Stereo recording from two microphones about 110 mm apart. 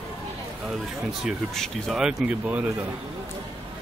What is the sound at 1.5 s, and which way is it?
Speech, 5° left (ahead or behind).